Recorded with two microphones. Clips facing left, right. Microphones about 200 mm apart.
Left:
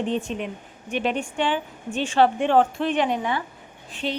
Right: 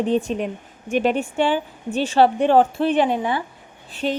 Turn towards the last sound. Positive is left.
turn(degrees=-40)  # may be behind; listen again after turning